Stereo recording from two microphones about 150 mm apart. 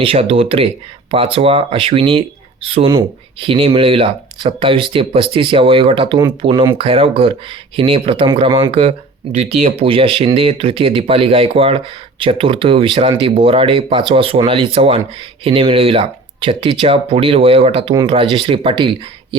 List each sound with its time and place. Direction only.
0.0 s speech: 35° right (ahead or behind)
9.3 s speech: 45° right (ahead or behind)